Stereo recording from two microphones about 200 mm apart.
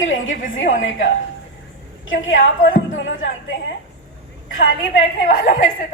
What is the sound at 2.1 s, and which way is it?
A woman's voice, 75° left (ahead or behind).